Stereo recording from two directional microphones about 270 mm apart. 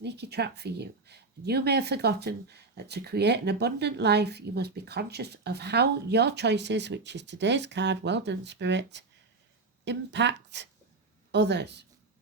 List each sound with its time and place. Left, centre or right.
0.0 s speech: right